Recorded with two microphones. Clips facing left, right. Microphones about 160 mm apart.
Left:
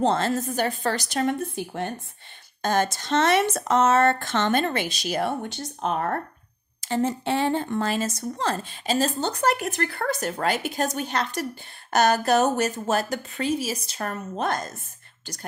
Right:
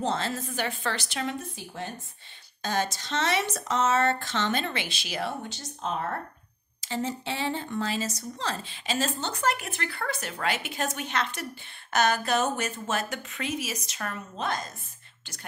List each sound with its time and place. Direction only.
0.0 s speech: 55° left (ahead or behind)